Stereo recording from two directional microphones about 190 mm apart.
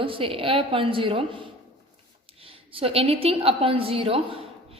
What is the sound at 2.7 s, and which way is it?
A woman's voice, 30° right (ahead or behind).